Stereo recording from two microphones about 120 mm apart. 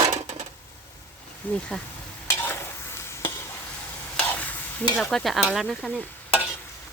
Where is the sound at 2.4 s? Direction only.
20° left (ahead or behind).